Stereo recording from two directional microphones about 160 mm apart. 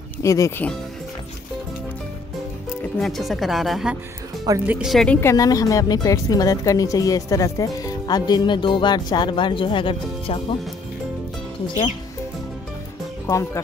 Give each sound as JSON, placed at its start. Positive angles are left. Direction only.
{"t": 0.2, "sound": "speech", "side_deg": 20}
{"t": 3.0, "sound": "a woman's voice", "side_deg": 0}
{"t": 5.3, "sound": "speech", "side_deg": 20}
{"t": 13.3, "sound": "speech", "side_deg": 15}